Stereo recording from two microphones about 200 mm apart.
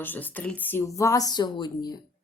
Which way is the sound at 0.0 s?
10° left (ahead or behind).